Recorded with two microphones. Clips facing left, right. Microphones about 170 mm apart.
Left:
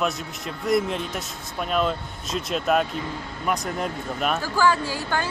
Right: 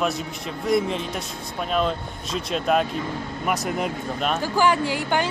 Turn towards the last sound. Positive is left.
turn(degrees=-20)  # may be behind; listen again after turning